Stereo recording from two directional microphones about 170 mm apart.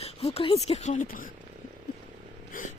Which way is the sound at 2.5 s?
55° left (ahead or behind).